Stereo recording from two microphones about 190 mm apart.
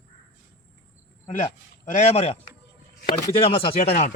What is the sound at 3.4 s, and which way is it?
Speech, 30° left (ahead or behind).